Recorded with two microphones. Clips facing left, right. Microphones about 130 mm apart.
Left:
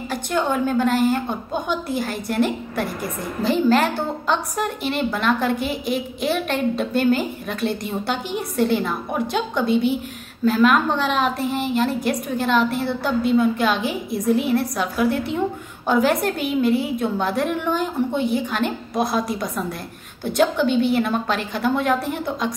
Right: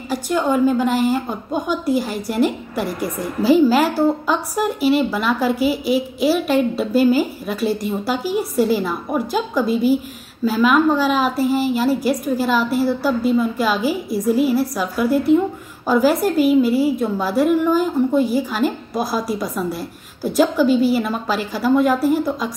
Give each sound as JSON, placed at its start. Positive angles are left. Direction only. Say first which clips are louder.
{"t": 0.1, "sound": "a woman's voice", "louder": "right 4 dB", "side_deg": -5}